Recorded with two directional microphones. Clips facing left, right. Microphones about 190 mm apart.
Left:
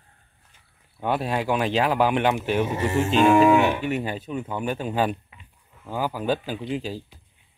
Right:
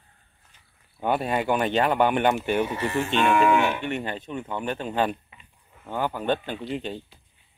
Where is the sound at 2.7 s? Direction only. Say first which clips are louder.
Left 3 dB; 25° left (ahead or behind).